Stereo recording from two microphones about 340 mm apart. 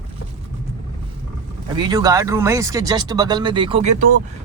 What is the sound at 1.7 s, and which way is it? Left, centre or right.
Speech, centre.